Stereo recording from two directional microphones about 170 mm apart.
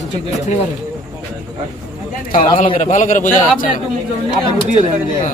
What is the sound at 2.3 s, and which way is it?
Speech, 45° left (ahead or behind).